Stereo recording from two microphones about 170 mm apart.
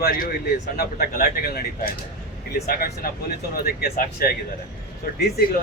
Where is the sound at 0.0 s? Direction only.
55° left (ahead or behind).